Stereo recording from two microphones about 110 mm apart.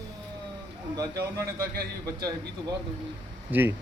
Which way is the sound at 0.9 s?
35° right (ahead or behind).